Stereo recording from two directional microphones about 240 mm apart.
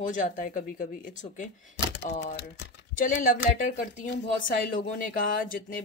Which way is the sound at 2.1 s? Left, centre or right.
Left.